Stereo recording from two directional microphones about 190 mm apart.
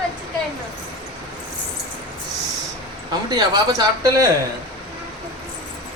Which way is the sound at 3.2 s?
20° right (ahead or behind).